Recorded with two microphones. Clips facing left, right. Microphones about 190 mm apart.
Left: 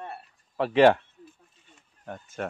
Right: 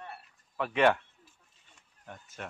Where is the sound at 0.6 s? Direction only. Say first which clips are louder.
Left 7 dB; 30° left (ahead or behind).